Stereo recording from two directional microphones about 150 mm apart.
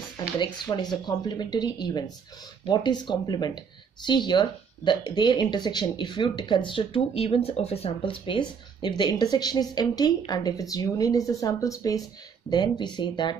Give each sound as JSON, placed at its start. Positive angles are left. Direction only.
{"t": 0.4, "sound": "speech", "side_deg": 30}